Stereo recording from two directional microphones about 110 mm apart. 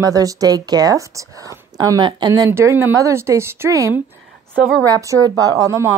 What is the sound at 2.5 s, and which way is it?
A woman's voice, 20° right (ahead or behind).